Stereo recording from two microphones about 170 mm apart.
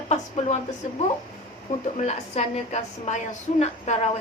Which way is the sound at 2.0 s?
40° left (ahead or behind).